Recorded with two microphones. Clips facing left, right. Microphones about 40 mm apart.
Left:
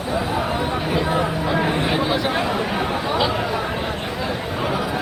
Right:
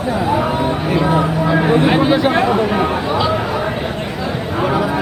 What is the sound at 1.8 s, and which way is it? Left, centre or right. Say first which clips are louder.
Chatter: right 7 dB; right.